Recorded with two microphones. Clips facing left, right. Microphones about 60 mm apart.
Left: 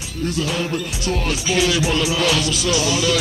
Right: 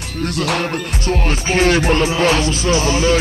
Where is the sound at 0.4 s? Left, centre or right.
Right.